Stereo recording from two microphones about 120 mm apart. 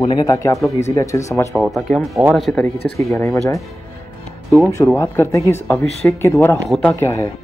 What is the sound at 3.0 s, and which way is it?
Speech, 20° left (ahead or behind).